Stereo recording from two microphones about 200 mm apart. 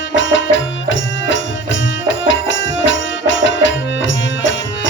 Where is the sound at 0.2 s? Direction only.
65° left (ahead or behind).